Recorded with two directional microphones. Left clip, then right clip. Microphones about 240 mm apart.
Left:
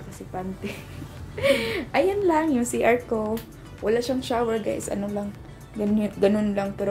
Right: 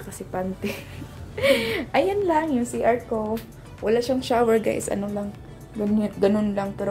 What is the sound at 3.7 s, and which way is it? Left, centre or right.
Speech, centre.